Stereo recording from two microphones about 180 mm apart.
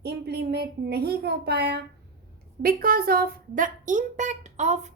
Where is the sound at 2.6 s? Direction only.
55° right (ahead or behind).